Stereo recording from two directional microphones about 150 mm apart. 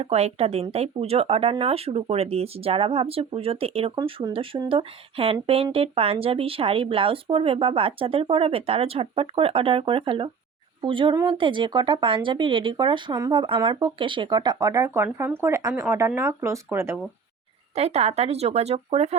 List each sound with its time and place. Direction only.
0.0 s speech: 45° right (ahead or behind); by 17.0 s 15° right (ahead or behind)
17.7 s speech: 45° right (ahead or behind)